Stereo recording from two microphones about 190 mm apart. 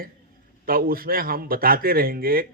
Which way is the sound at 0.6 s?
50° right (ahead or behind).